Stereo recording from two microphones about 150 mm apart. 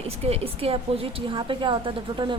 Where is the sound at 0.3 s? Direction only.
40° right (ahead or behind).